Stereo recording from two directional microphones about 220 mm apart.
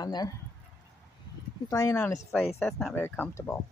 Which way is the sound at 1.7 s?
15° left (ahead or behind).